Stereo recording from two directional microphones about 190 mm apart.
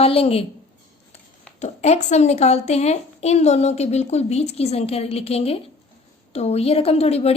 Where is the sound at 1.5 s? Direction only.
35° left (ahead or behind).